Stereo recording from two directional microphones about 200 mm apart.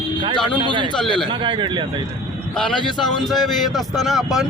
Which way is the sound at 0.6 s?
25° right (ahead or behind).